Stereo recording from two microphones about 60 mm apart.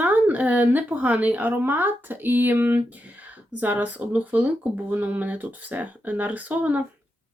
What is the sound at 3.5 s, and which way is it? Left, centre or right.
A woman's voice, right.